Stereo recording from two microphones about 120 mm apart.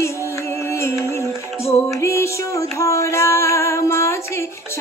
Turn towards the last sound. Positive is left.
turn(degrees=25)  # may be behind; listen again after turning